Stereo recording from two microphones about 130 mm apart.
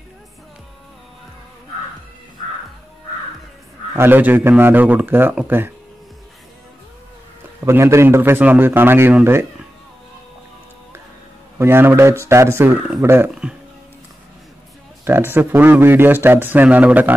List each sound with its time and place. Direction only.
3.9 s speech: 15° right (ahead or behind)
7.6 s speech: 20° right (ahead or behind)
11.5 s a man's voice: 20° right (ahead or behind)
13.3 s speech: 5° right (ahead or behind)
15.0 s speech: 15° right (ahead or behind)